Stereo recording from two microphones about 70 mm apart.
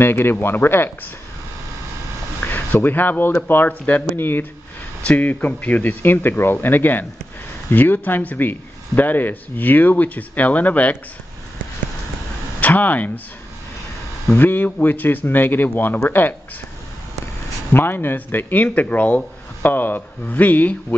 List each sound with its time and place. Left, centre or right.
0.0 s speech: left
2.4 s speech: left
12.5 s speech: left
14.3 s speech: left
17.7 s speech: left